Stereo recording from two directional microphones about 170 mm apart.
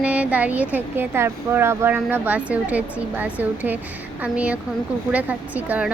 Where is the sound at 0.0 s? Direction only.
10° right (ahead or behind).